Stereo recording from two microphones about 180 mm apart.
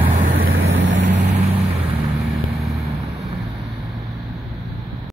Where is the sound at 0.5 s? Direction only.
90° right.